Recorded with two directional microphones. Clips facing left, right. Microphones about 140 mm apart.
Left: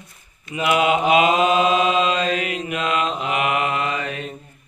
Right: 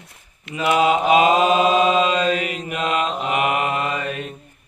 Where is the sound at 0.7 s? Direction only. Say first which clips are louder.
Right 1 dB; 40° right (ahead or behind).